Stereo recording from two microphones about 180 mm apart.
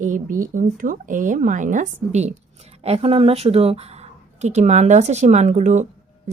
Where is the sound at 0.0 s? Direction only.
45° right (ahead or behind).